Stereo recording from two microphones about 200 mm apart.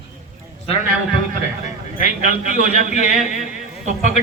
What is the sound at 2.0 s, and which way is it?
A man's voice, 35° left (ahead or behind).